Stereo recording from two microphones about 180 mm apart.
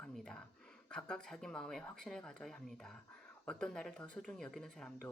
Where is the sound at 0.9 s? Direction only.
5° left (ahead or behind).